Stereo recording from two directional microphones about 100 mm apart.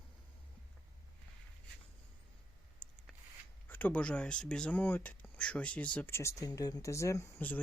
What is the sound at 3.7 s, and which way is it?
Speech, 15° left (ahead or behind).